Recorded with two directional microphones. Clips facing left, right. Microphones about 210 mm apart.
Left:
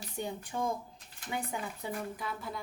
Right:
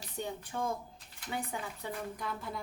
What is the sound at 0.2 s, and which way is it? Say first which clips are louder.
Speech: left 1 dB; 15° left (ahead or behind).